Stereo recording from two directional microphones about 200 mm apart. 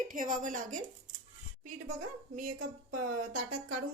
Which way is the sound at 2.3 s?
40° right (ahead or behind).